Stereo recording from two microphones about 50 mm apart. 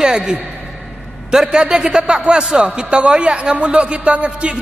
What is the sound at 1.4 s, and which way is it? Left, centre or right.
A man's voice, right.